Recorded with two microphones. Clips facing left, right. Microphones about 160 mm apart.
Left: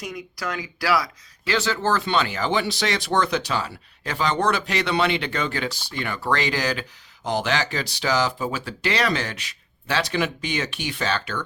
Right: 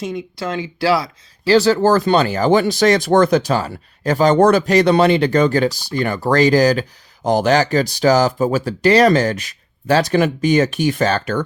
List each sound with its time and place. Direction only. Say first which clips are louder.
0.0 s speech: right 7 dB; 25° right (ahead or behind); by 11.4 s 45° right (ahead or behind)